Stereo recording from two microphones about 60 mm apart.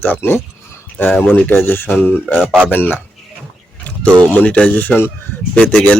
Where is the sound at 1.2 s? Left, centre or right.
Left.